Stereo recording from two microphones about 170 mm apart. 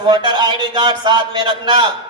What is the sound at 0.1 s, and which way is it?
A man's voice, 25° right (ahead or behind).